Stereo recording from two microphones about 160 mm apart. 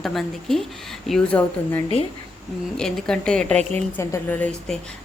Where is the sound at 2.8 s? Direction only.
5° left (ahead or behind).